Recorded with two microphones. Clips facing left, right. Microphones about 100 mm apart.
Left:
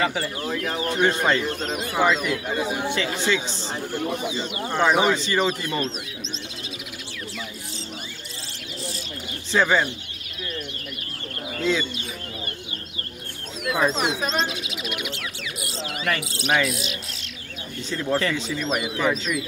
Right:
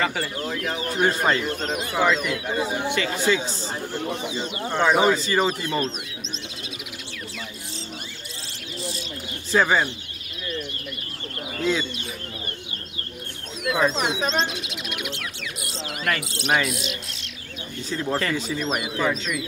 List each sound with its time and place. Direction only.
0.0 s speech: 10° left (ahead or behind)
0.5 s speech: 5° right (ahead or behind)
3.9 s speech: 10° left (ahead or behind); by 5.9 s 5° right (ahead or behind)
9.5 s speech: 10° right (ahead or behind)
11.5 s speech: 10° right (ahead or behind)
13.7 s bird: centre (ahead or behind)
16.2 s speech: centre (ahead or behind)
17.9 s speech: 15° right (ahead or behind)
18.7 s speech: centre (ahead or behind)